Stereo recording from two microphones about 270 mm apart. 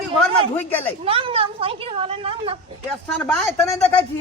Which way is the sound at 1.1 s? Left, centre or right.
Right.